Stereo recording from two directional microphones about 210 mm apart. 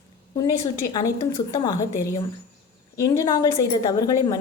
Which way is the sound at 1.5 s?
15° left (ahead or behind).